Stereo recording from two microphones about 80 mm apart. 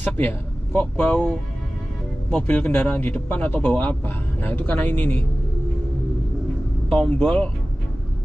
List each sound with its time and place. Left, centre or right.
0.0 s speech: left
2.3 s a man's voice: centre
6.9 s speech: centre